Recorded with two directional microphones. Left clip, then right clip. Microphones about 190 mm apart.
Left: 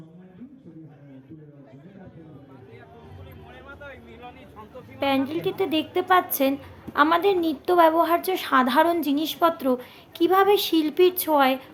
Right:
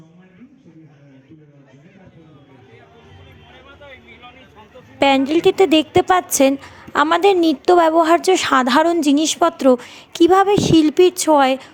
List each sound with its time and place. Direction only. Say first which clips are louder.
4.9 s a woman's voice: right 10 dB; 50° right (ahead or behind)